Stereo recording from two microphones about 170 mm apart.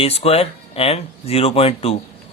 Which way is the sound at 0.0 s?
35° left (ahead or behind).